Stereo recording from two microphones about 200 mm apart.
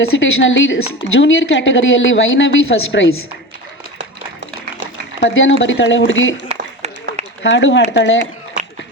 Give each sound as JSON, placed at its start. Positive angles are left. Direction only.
{"t": 0.0, "sound": "a woman's voice", "side_deg": 75}
{"t": 5.2, "sound": "a woman's voice", "side_deg": 70}
{"t": 6.5, "sound": "a sound", "side_deg": -35}
{"t": 7.4, "sound": "a woman's voice", "side_deg": 65}